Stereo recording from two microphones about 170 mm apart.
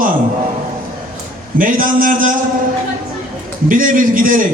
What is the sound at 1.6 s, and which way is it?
Speech, 50° right (ahead or behind).